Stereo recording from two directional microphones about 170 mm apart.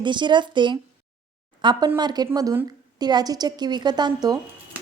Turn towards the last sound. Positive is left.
turn(degrees=-25)  # may be behind; listen again after turning